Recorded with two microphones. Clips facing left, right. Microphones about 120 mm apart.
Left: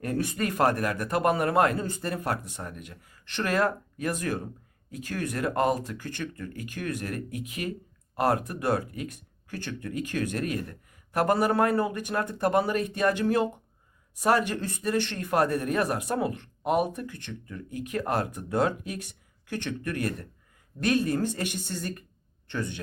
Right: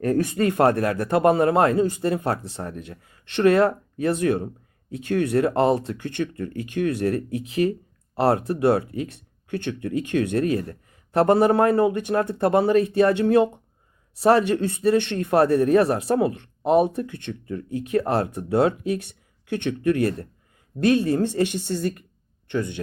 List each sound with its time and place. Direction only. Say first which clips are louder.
0.0 s speech: right 8 dB; 40° right (ahead or behind)
0.3 s speech: right 5 dB; 30° right (ahead or behind)